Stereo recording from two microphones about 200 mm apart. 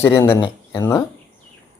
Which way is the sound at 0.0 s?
10° left (ahead or behind).